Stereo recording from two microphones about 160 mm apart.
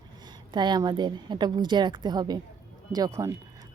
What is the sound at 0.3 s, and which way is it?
A woman's voice, 30° right (ahead or behind).